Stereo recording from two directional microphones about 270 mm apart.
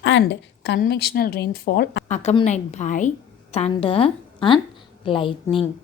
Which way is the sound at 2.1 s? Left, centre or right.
Left.